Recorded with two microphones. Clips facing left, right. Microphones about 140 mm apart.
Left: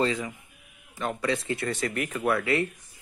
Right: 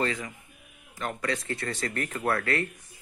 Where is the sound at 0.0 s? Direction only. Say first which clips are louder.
Left 3 dB; 15° left (ahead or behind).